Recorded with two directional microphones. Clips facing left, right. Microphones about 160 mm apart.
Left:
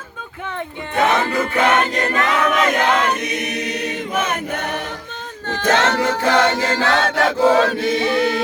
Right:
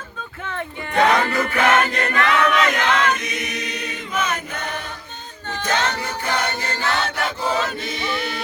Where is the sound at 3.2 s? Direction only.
60° left (ahead or behind).